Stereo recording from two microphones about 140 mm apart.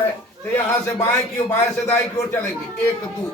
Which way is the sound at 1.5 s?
15° left (ahead or behind).